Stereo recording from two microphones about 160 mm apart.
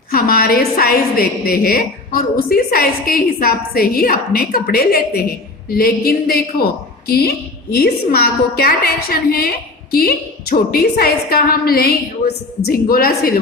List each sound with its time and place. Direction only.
0.1 s a woman's voice: 70° left (ahead or behind)